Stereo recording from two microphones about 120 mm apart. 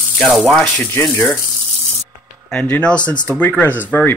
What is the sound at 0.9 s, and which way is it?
Speech, 20° left (ahead or behind).